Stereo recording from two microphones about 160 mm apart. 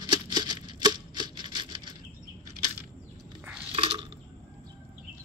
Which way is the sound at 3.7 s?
35° right (ahead or behind).